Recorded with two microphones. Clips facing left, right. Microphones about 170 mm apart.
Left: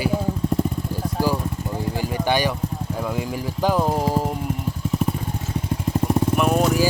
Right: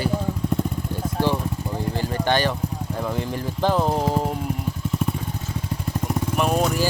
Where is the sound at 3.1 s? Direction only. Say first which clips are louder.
Left 1 dB; 10° left (ahead or behind).